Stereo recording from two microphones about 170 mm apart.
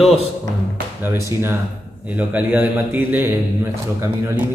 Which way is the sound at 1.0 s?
15° right (ahead or behind).